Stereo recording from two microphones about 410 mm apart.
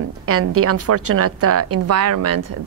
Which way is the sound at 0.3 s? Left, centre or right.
Right.